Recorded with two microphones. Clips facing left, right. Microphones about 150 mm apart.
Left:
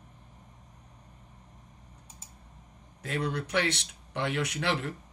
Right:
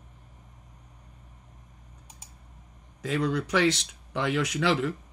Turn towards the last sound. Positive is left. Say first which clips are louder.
# right 5 dB
turn(degrees=-90)